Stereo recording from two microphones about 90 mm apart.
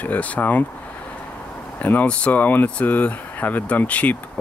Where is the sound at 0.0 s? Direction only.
15° left (ahead or behind).